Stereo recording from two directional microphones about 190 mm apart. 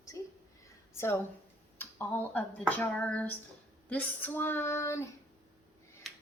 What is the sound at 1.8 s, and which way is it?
Speech, 10° left (ahead or behind).